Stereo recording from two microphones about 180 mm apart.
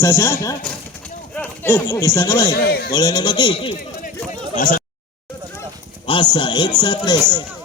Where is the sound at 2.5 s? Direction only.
60° left (ahead or behind).